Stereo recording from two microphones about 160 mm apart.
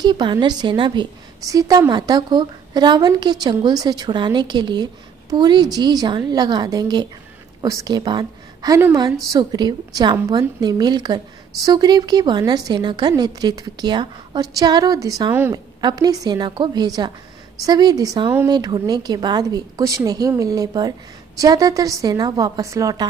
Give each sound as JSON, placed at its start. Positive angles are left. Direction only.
{"t": 0.0, "sound": "a woman's voice", "side_deg": -25}